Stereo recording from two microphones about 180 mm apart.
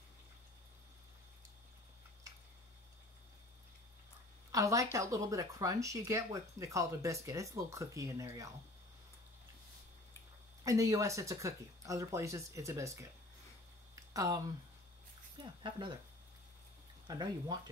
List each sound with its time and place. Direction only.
4.5 s a woman's voice: 20° right (ahead or behind)
10.6 s speech: 20° right (ahead or behind)
13.9 s a sound: 20° right (ahead or behind)
15.3 s speech: 25° right (ahead or behind)
17.1 s speech: 20° right (ahead or behind)